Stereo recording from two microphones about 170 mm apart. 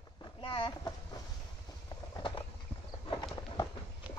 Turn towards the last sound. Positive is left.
turn(degrees=25)  # may be behind; listen again after turning